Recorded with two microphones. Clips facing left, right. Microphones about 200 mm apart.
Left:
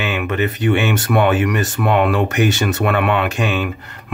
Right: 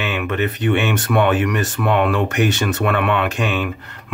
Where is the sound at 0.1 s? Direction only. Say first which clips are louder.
Left 1 dB; 10° left (ahead or behind).